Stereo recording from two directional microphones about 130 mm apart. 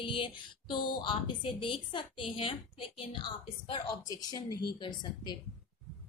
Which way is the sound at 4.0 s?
30° left (ahead or behind).